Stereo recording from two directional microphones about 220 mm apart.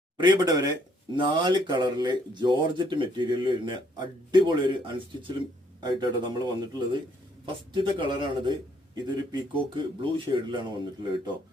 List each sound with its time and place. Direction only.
0.2 s speech: 20° right (ahead or behind)